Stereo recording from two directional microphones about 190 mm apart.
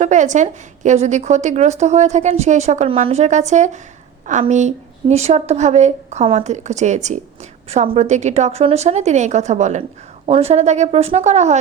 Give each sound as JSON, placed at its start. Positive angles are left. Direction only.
{"t": 0.0, "sound": "a woman's voice", "side_deg": -40}